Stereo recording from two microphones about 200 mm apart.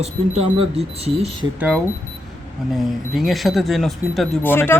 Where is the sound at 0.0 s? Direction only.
30° right (ahead or behind).